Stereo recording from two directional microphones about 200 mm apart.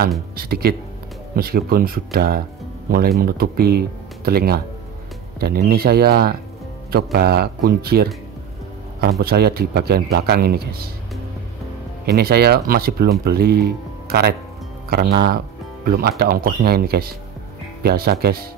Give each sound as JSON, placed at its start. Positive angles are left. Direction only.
{"t": 0.4, "sound": "speech", "side_deg": -50}
{"t": 9.2, "sound": "speech", "side_deg": -50}
{"t": 12.1, "sound": "speech", "side_deg": -50}